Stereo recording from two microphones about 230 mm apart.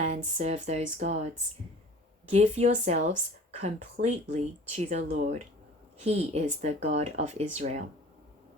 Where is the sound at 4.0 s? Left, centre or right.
Right.